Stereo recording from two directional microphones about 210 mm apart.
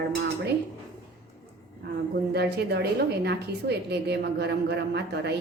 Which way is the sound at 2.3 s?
50° right (ahead or behind).